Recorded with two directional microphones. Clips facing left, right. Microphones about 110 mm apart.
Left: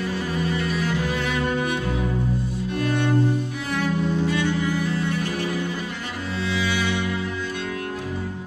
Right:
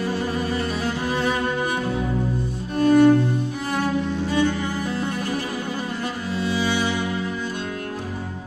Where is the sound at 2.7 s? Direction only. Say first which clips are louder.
Right 10 dB; 40° right (ahead or behind).